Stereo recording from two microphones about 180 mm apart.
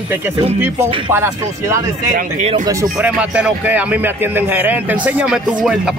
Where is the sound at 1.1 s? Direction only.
15° right (ahead or behind).